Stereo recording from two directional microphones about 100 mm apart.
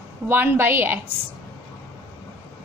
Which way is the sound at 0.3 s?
20° right (ahead or behind).